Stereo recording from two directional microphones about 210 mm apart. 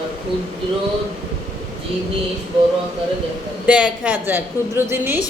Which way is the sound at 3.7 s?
5° right (ahead or behind).